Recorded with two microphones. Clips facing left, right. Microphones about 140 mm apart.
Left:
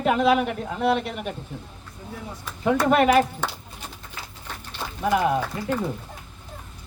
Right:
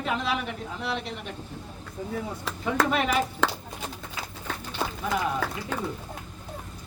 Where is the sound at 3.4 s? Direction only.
90° right.